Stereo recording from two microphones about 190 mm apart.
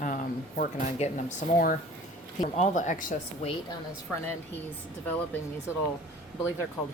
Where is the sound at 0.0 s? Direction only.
45° left (ahead or behind).